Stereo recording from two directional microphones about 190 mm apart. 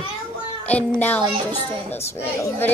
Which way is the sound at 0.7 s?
5° left (ahead or behind).